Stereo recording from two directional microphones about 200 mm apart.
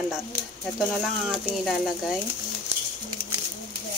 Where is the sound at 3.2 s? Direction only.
50° right (ahead or behind).